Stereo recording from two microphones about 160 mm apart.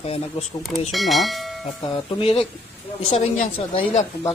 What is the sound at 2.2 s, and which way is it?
A woman's voice, 35° left (ahead or behind).